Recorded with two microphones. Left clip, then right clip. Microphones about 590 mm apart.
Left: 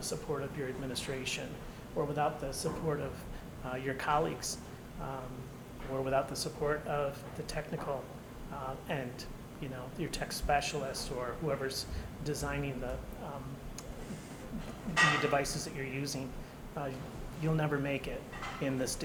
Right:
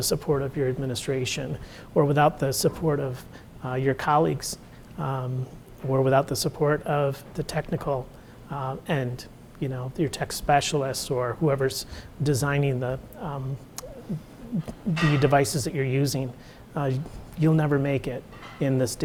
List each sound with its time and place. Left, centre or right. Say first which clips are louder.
0.0 s speech: right 12 dB; right
2.0 s speech: right 12 dB; right
15.2 s speech: right 10 dB; right